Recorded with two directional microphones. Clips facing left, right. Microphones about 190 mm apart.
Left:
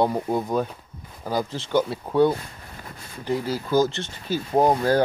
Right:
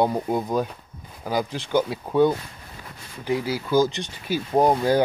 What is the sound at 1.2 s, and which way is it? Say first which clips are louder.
Speech: right 1 dB; 15° right (ahead or behind).